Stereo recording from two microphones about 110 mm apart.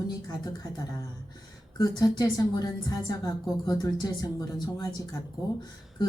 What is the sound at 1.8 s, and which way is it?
Speech, 35° left (ahead or behind).